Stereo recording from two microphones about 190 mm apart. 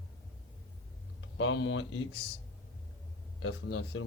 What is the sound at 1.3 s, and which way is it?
Speech, 75° left (ahead or behind).